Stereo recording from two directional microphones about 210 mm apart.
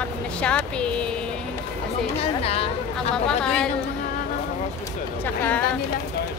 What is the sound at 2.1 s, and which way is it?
Speech, 30° left (ahead or behind).